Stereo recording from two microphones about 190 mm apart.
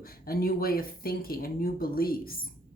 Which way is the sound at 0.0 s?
50° left (ahead or behind).